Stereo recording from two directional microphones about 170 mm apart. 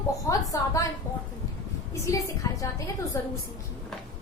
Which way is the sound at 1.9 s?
20° left (ahead or behind).